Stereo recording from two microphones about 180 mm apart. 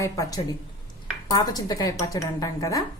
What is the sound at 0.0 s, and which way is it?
A woman's voice, 20° left (ahead or behind).